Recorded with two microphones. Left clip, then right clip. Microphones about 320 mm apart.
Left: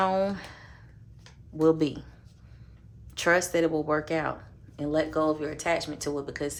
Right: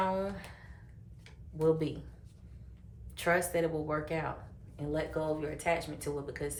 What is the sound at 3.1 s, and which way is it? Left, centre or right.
Speech, left.